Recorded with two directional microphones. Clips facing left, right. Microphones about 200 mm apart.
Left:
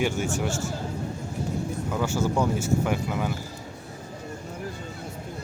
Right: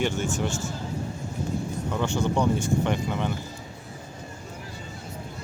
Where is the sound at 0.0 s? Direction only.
10° left (ahead or behind).